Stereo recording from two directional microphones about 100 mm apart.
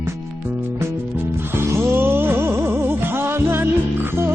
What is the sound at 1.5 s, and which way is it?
Music, 25° right (ahead or behind).